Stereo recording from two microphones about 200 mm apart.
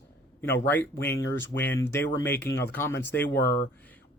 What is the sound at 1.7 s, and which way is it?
Speech, 10° left (ahead or behind).